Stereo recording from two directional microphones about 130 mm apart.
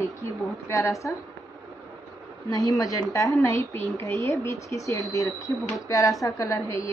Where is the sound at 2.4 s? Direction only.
25° left (ahead or behind).